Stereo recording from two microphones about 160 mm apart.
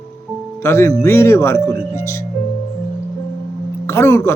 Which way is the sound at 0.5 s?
15° left (ahead or behind).